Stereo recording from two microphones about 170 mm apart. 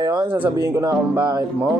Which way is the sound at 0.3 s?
15° right (ahead or behind).